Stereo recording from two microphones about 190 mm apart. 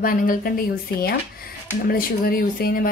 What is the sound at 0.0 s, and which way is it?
Speech, 45° left (ahead or behind).